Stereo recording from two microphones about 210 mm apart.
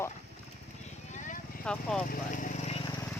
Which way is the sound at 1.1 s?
35° left (ahead or behind).